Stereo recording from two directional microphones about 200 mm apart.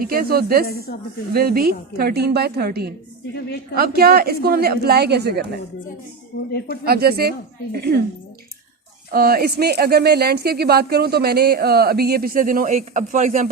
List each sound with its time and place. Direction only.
0.0 s speech: 50° right (ahead or behind)
0.6 s speech: 50° left (ahead or behind)
1.3 s speech: 50° right (ahead or behind)
6.8 s speech: 50° right (ahead or behind)
9.1 s speech: 50° right (ahead or behind)